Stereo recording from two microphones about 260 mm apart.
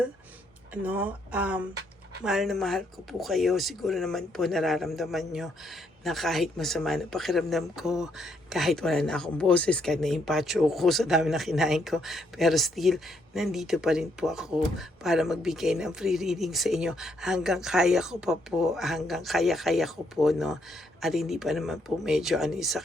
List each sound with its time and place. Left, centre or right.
0.7 s speech: centre